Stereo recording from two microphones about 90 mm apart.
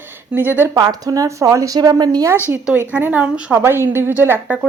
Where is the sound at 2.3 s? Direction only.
20° right (ahead or behind).